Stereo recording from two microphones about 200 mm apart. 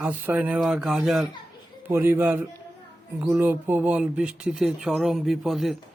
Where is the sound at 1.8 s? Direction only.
10° right (ahead or behind).